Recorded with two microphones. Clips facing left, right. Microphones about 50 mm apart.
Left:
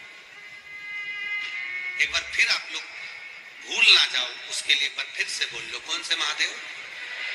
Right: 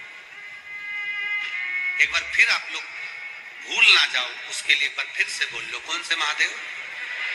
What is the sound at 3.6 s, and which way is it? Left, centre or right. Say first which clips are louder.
A man's voice: right 3 dB; right.